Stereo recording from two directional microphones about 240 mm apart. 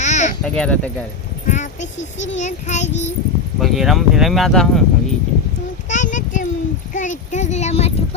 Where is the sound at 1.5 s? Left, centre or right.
Left.